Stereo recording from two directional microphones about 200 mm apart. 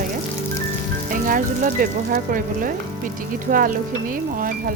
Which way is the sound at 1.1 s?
40° right (ahead or behind).